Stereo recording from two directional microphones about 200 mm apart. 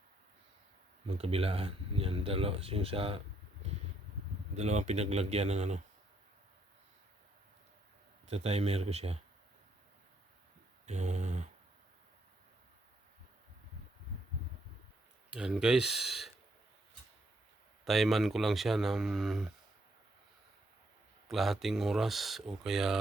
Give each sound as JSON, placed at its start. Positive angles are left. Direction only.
{"t": 1.0, "sound": "speech", "side_deg": -30}
{"t": 4.5, "sound": "speech", "side_deg": -35}
{"t": 8.3, "sound": "speech", "side_deg": -30}
{"t": 10.8, "sound": "a sound", "side_deg": -35}
{"t": 15.3, "sound": "speech", "side_deg": -5}
{"t": 17.8, "sound": "speech", "side_deg": 0}
{"t": 21.2, "sound": "speech", "side_deg": 0}